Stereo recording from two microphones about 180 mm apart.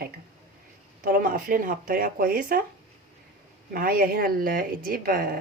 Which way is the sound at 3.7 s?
55° right (ahead or behind).